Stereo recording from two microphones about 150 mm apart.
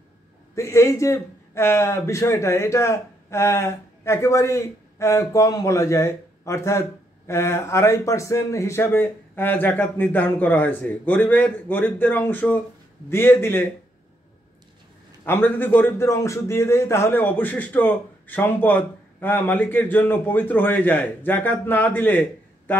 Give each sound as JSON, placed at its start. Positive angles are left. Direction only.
{"t": 0.6, "sound": "a man's voice", "side_deg": 20}
{"t": 15.2, "sound": "a man's voice", "side_deg": 15}